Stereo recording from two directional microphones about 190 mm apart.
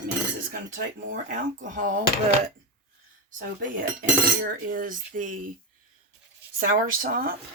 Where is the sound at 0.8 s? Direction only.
45° right (ahead or behind).